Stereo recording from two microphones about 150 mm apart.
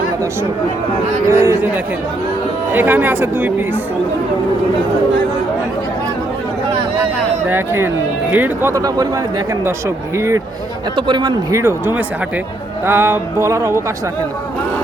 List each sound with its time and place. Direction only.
1.3 s speech: 20° right (ahead or behind)
2.7 s music: 10° right (ahead or behind)
7.4 s music: 15° right (ahead or behind)
8.3 s speech: 15° right (ahead or behind)
10.2 s speech: 20° right (ahead or behind)
10.9 s speech: 30° right (ahead or behind)
12.8 s music: 15° right (ahead or behind)